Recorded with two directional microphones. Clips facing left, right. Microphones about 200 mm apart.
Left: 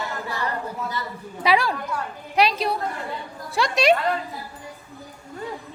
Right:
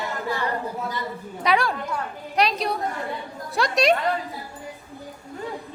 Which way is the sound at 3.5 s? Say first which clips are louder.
Left 1 dB; centre (ahead or behind).